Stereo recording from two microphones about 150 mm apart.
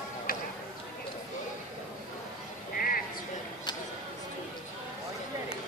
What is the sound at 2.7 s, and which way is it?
Sheep, 75° left (ahead or behind).